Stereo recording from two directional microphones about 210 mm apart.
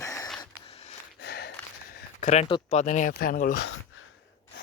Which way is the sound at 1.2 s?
50° left (ahead or behind).